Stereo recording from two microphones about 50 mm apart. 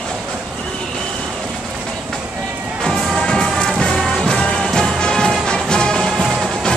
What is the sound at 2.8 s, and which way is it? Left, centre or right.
Music, centre.